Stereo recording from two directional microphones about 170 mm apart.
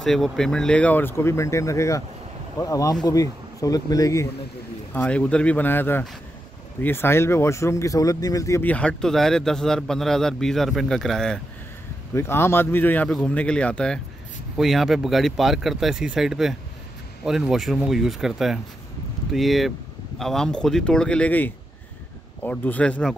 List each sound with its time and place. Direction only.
0.0 s speech: centre (ahead or behind); by 4.3 s 20° left (ahead or behind)
4.9 s speech: 5° left (ahead or behind)
12.1 s speech: 15° left (ahead or behind)